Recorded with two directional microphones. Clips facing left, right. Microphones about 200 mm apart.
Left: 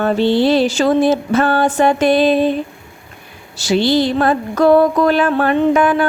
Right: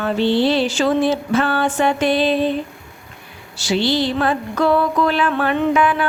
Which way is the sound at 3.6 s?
45° left (ahead or behind).